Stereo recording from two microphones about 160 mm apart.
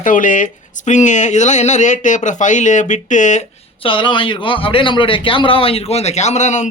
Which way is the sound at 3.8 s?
30° left (ahead or behind).